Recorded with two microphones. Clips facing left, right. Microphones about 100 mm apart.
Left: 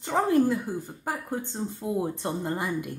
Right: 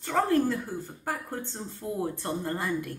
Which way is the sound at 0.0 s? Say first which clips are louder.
Left 2 dB; 15° left (ahead or behind).